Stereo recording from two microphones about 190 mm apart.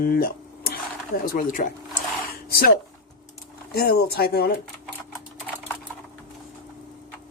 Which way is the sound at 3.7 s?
55° left (ahead or behind).